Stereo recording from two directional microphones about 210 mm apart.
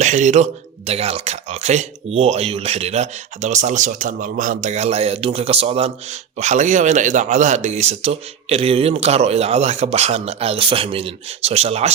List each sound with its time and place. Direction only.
0.0 s speech: 35° right (ahead or behind)